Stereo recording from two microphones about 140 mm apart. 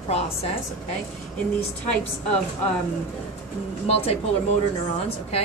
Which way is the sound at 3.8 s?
45° left (ahead or behind).